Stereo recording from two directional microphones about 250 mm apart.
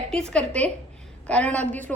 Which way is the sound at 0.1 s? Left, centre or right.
Centre.